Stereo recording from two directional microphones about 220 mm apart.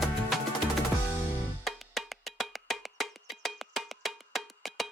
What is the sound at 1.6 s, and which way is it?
Wood block, centre (ahead or behind).